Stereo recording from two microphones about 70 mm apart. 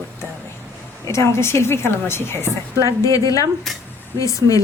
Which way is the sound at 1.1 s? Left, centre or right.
Left.